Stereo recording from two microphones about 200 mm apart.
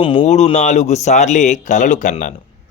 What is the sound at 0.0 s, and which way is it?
Speech, 25° left (ahead or behind).